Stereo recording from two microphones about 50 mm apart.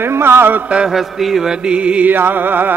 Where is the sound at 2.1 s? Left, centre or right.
Right.